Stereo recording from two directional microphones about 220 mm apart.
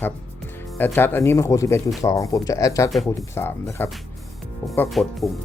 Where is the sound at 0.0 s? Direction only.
10° left (ahead or behind).